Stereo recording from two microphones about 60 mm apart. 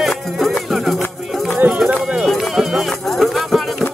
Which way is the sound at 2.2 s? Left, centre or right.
Centre.